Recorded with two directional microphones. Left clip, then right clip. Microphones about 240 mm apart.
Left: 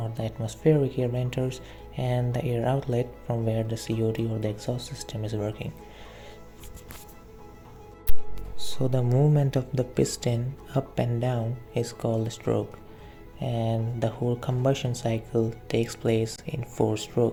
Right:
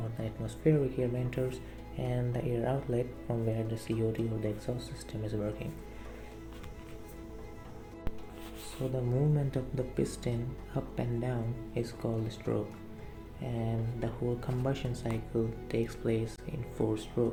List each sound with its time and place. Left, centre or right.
0.2 s speech: left
8.9 s speech: left